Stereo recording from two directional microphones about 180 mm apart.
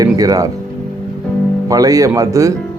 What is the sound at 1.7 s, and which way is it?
Speech, 20° right (ahead or behind).